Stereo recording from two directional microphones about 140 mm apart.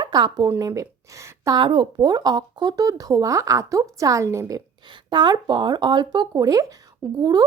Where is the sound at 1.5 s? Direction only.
35° right (ahead or behind).